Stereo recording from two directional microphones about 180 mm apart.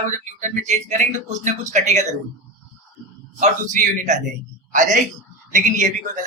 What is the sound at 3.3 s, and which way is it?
A man's voice, 45° right (ahead or behind).